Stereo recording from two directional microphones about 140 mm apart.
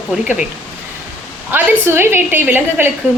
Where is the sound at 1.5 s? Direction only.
15° right (ahead or behind).